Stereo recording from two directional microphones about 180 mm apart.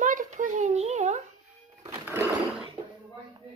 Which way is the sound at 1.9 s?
15° right (ahead or behind).